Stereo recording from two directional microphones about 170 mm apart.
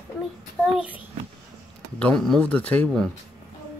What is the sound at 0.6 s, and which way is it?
Speech, 5° right (ahead or behind).